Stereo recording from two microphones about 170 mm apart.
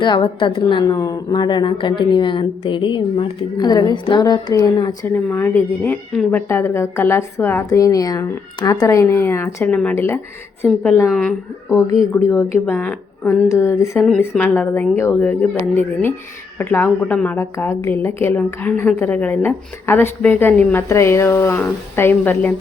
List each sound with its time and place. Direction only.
0.0 s a woman's voice: 30° left (ahead or behind)
5.1 s a woman's voice: 10° left (ahead or behind)
11.0 s a woman's voice: 5° left (ahead or behind)
12.1 s a woman's voice: 15° left (ahead or behind)